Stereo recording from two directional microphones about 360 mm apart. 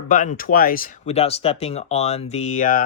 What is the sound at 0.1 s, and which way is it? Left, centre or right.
Speech, left.